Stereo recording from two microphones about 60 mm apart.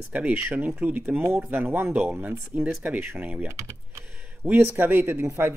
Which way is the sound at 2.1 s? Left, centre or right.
Right.